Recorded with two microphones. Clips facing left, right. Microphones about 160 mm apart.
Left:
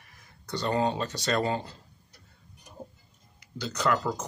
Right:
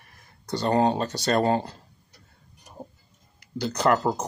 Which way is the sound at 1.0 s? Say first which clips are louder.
Right 4 dB; 35° right (ahead or behind).